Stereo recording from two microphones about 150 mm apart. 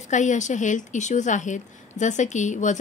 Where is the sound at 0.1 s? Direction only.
55° left (ahead or behind).